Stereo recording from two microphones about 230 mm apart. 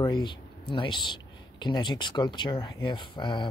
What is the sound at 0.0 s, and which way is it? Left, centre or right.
Speech, centre.